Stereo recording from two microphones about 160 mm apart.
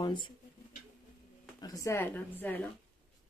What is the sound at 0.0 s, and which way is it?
Speech, 30° left (ahead or behind).